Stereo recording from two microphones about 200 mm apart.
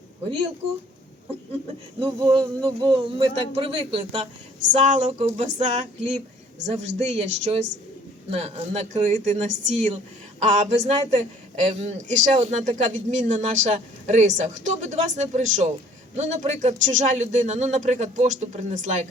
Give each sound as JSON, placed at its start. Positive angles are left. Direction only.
{"t": 2.0, "sound": "a man's voice", "side_deg": -20}
{"t": 4.8, "sound": "a man's voice", "side_deg": -35}